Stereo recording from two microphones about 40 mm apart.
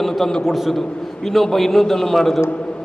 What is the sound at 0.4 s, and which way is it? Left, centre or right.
A man's voice, centre.